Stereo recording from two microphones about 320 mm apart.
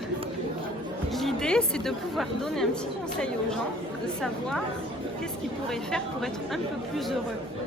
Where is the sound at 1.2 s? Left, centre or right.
Centre.